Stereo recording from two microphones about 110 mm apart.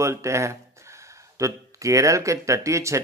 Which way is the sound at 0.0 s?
25° right (ahead or behind).